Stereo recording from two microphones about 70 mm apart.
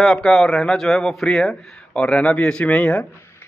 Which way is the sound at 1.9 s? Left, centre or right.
Centre.